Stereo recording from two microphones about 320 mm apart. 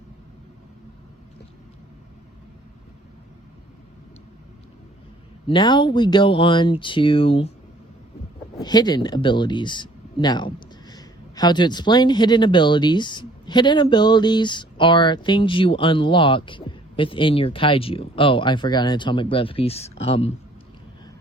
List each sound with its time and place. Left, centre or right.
5.5 s speech: centre
8.6 s speech: centre